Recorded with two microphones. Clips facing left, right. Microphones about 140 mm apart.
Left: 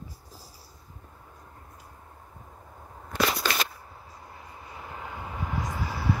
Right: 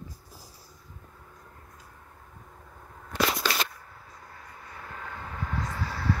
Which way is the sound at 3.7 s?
20° left (ahead or behind).